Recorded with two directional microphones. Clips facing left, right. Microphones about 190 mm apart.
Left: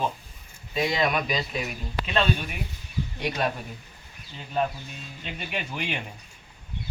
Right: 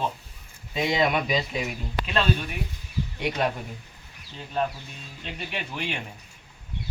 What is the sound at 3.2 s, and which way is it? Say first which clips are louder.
Speech: right 2 dB; 15° right (ahead or behind).